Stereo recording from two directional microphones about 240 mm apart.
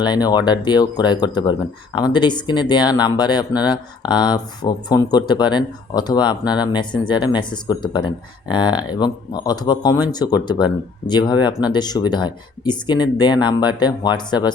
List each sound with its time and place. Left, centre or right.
0.0 s speech: centre